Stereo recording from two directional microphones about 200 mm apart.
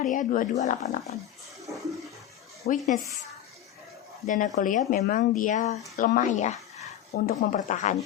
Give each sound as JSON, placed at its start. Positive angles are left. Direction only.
{"t": 0.0, "sound": "speech", "side_deg": 40}
{"t": 2.6, "sound": "speech", "side_deg": 35}
{"t": 4.3, "sound": "speech", "side_deg": 40}